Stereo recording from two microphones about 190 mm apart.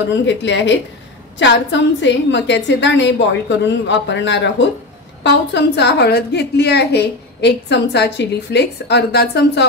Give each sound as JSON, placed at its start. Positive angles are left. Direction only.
{"t": 0.1, "sound": "a woman's voice", "side_deg": 70}